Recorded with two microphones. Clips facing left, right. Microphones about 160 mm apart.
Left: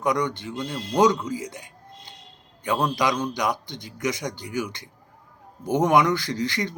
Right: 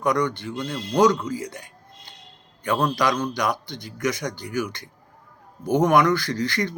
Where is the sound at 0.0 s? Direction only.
20° left (ahead or behind).